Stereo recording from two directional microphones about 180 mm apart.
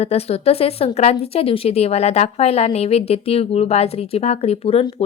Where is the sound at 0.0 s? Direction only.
35° left (ahead or behind).